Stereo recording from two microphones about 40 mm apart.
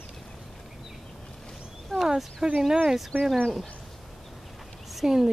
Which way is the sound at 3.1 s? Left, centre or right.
Right.